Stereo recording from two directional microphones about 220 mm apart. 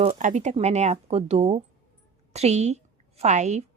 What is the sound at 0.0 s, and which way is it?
A woman's voice, 30° right (ahead or behind).